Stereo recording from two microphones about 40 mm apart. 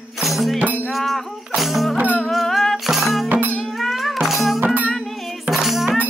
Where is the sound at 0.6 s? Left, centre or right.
Right.